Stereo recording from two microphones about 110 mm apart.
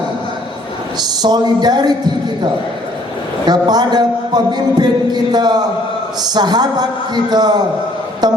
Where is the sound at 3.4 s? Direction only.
40° right (ahead or behind).